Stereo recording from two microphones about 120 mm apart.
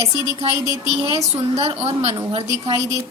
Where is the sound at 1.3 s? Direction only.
55° right (ahead or behind).